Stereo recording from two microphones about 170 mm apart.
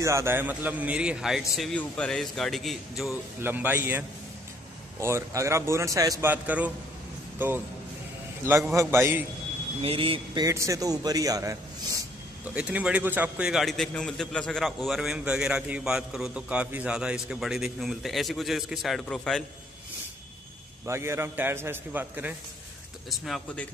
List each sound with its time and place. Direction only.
0.0 s a man's voice: 15° right (ahead or behind); by 3.2 s centre (ahead or behind)
3.4 s a man's voice: 10° right (ahead or behind)
5.0 s a man's voice: 15° right (ahead or behind)
8.7 s a man's voice: 15° right (ahead or behind)
9.8 s a man's voice: 30° right (ahead or behind)
12.5 s a man's voice: 5° right (ahead or behind)
20.8 s a man's voice: 15° right (ahead or behind)
23.0 s a man's voice: centre (ahead or behind)